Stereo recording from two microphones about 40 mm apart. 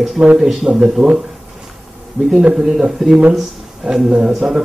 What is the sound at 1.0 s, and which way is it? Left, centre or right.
Speech, right.